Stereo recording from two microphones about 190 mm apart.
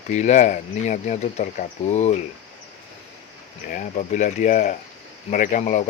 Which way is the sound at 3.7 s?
45° left (ahead or behind).